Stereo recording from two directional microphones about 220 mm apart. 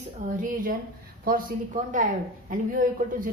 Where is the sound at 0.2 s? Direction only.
35° right (ahead or behind).